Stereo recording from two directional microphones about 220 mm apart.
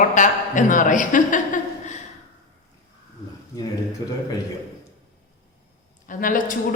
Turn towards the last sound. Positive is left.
turn(degrees=40)  # may be behind; listen again after turning